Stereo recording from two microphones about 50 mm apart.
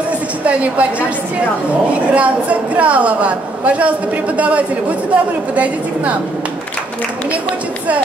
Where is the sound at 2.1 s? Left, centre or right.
Right.